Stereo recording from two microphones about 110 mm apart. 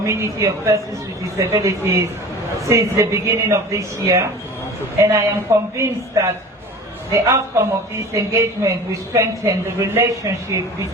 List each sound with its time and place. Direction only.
0.0 s speech: 25° right (ahead or behind)